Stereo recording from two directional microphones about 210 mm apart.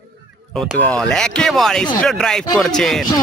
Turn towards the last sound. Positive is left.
turn(degrees=0)  # may be behind; listen again after turning